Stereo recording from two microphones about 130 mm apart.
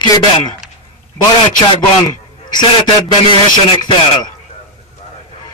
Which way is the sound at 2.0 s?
30° left (ahead or behind).